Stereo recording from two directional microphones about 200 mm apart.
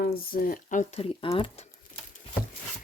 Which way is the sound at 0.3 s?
45° left (ahead or behind).